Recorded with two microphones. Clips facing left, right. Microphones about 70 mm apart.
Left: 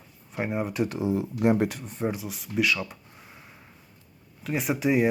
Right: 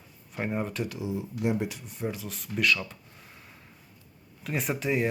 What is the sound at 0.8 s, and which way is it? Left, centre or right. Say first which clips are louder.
Speech: left 6 dB; left.